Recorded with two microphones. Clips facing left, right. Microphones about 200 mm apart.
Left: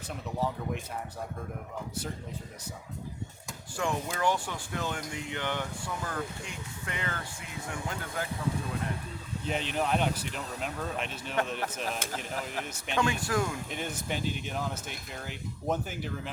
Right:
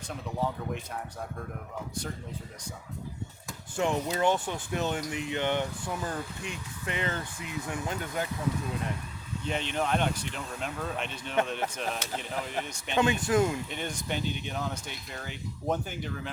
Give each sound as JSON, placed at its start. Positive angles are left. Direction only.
{"t": 3.8, "sound": "speech", "side_deg": -20}
{"t": 9.5, "sound": "speech", "side_deg": 5}
{"t": 13.0, "sound": "speech", "side_deg": -20}
{"t": 13.7, "sound": "speech", "side_deg": 5}